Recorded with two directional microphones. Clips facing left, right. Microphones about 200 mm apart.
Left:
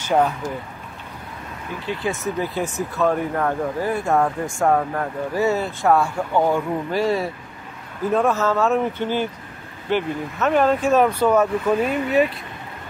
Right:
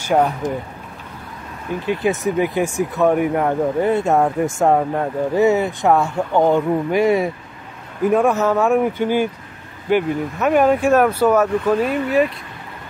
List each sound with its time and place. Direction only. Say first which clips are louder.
0.0 s speech: right 2 dB; 10° right (ahead or behind)
2.0 s speech: right 6 dB; 15° right (ahead or behind); by 12.3 s centre (ahead or behind)